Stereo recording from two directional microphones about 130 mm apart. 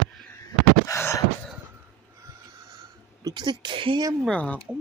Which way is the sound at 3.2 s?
35° right (ahead or behind).